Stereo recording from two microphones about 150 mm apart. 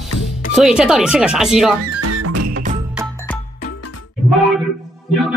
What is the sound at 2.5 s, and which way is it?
Music, 60° right (ahead or behind).